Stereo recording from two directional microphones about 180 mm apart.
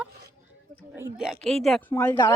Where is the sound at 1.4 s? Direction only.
Centre (ahead or behind).